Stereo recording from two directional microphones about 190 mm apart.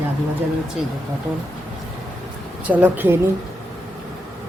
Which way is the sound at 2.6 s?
10° right (ahead or behind).